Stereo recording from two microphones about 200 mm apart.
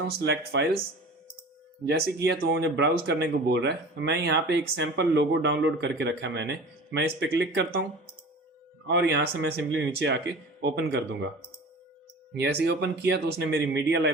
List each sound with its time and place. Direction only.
0.2 s speech: 55° right (ahead or behind)
1.9 s speech: 55° right (ahead or behind)
8.9 s speech: 60° right (ahead or behind)
12.4 s speech: 55° right (ahead or behind)